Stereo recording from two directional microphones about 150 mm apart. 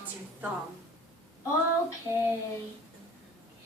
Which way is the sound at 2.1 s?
20° right (ahead or behind).